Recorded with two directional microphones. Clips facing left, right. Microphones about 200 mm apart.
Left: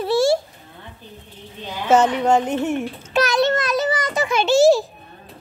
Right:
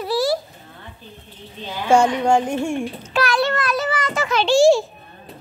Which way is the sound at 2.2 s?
10° right (ahead or behind).